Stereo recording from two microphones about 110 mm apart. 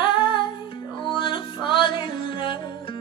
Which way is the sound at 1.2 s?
50° left (ahead or behind).